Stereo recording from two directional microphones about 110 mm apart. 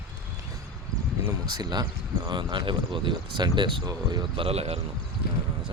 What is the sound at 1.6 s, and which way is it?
Speech, 40° right (ahead or behind).